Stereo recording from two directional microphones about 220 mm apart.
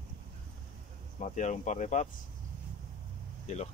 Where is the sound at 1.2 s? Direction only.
35° left (ahead or behind).